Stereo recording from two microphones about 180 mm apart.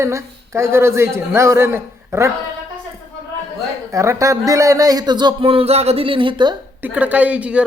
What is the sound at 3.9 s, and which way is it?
A man's voice, 15° right (ahead or behind).